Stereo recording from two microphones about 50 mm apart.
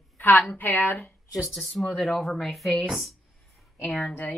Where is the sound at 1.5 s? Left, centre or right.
Centre.